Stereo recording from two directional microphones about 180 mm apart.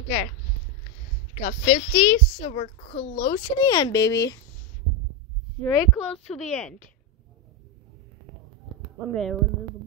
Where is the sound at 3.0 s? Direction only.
50° left (ahead or behind).